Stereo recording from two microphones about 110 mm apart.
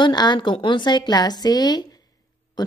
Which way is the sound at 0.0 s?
40° left (ahead or behind).